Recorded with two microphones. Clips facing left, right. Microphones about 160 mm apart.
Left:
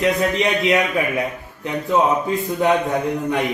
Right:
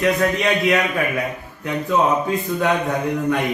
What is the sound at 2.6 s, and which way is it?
Speech, 20° left (ahead or behind).